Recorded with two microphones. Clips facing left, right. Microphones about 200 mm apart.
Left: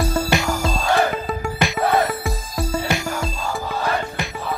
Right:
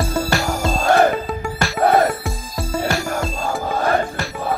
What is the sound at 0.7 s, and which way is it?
Music, 50° right (ahead or behind).